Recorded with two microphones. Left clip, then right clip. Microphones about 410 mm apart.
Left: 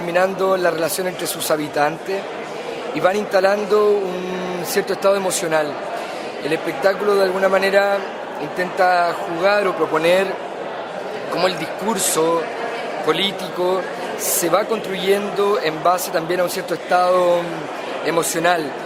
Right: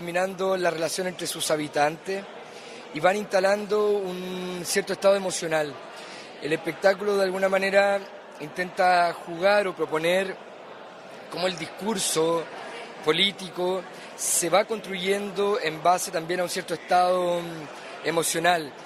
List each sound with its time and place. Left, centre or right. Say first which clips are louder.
0.1 s speech: left 8 dB; right
3.0 s speech: left 5 dB; right
11.3 s speech: left 8 dB; right